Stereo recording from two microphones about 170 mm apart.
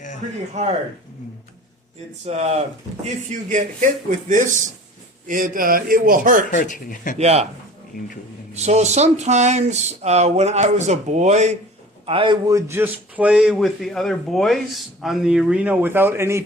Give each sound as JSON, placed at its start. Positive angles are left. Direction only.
{"t": 0.6, "sound": "speech", "side_deg": -40}
{"t": 2.2, "sound": "a man's voice", "side_deg": -40}
{"t": 6.5, "sound": "speech", "side_deg": 50}
{"t": 7.2, "sound": "speech", "side_deg": -40}
{"t": 7.9, "sound": "speech", "side_deg": 50}
{"t": 8.5, "sound": "speech", "side_deg": -40}
{"t": 12.0, "sound": "a man's voice", "side_deg": -30}